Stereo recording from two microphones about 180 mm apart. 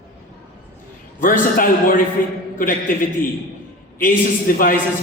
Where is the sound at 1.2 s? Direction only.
50° left (ahead or behind).